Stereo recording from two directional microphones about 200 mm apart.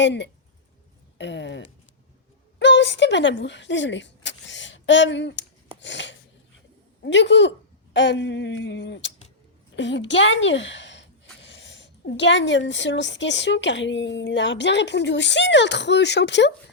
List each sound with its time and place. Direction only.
0.0 s a woman's voice: 60° left (ahead or behind)